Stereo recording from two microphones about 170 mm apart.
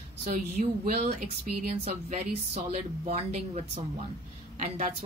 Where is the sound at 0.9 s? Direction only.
40° right (ahead or behind).